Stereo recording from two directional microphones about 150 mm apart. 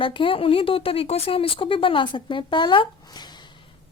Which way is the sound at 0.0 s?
35° left (ahead or behind).